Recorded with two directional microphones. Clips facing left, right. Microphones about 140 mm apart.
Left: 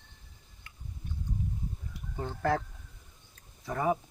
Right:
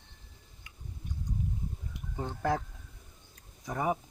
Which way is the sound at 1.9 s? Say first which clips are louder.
Even; 15° right (ahead or behind).